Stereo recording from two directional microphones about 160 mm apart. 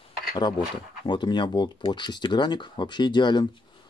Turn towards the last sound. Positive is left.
turn(degrees=30)  # may be behind; listen again after turning